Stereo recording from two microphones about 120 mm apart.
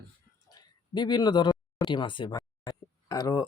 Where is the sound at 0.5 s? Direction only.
40° left (ahead or behind).